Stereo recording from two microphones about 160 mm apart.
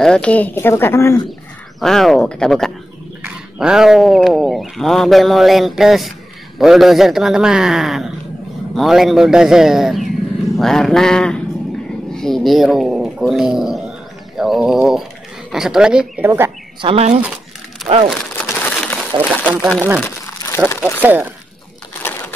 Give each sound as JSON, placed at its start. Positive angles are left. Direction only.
{"t": 0.0, "sound": "speech", "side_deg": 5}
{"t": 1.8, "sound": "speech", "side_deg": 0}
{"t": 12.1, "sound": "a sound", "side_deg": 5}
{"t": 15.5, "sound": "speech", "side_deg": -5}
{"t": 16.8, "sound": "speech", "side_deg": -40}
{"t": 18.3, "sound": "crumpling", "side_deg": 10}
{"t": 19.4, "sound": "speech", "side_deg": -10}
{"t": 20.4, "sound": "speech", "side_deg": 15}
{"t": 21.0, "sound": "speech", "side_deg": -10}
{"t": 22.0, "sound": "a sound", "side_deg": 15}